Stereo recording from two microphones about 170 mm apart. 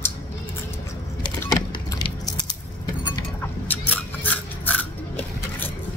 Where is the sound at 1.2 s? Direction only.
20° left (ahead or behind).